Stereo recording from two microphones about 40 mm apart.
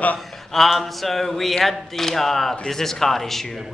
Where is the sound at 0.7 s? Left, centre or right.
Centre.